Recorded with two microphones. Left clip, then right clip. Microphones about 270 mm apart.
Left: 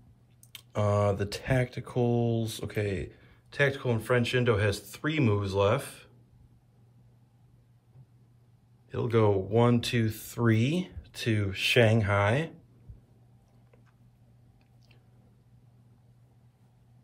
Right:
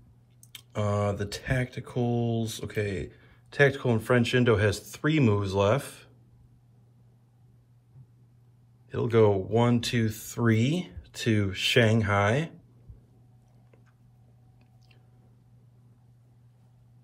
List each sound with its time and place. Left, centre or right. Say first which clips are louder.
0.5 s speech: left 2 dB; centre
8.8 s speech: right 3 dB; centre